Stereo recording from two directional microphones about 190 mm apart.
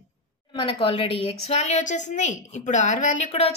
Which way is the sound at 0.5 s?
25° left (ahead or behind).